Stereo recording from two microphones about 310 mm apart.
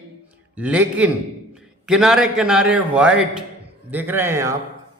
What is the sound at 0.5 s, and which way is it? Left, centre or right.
A man's voice, centre.